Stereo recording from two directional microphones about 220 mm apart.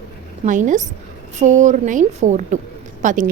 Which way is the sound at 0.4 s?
35° right (ahead or behind).